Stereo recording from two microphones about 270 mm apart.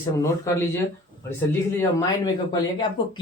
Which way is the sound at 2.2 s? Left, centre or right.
Centre.